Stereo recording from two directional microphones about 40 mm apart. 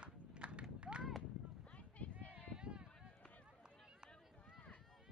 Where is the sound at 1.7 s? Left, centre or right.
Left.